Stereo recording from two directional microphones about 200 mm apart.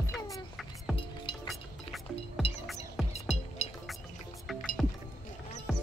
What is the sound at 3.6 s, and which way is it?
Music, 35° left (ahead or behind).